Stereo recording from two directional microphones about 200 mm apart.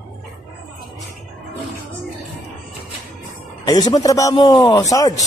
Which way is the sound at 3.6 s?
20° left (ahead or behind).